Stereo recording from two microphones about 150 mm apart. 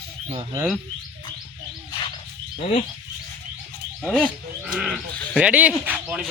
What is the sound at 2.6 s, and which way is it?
Speech, 45° left (ahead or behind).